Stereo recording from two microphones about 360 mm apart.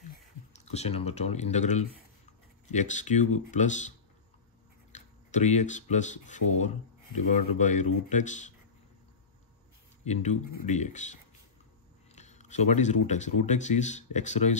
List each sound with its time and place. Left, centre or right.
0.5 s speech: centre
4.9 s speech: centre
10.0 s speech: centre
12.2 s speech: centre